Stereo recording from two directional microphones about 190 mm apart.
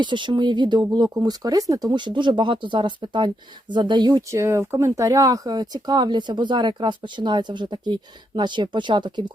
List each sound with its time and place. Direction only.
0.0 s speech: 25° right (ahead or behind)